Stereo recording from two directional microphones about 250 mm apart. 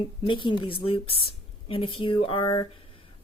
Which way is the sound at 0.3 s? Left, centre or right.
Centre.